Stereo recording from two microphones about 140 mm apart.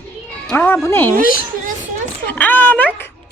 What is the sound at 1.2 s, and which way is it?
Speech, 90° left.